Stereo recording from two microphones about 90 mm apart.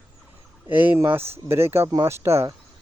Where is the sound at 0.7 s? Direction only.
20° right (ahead or behind).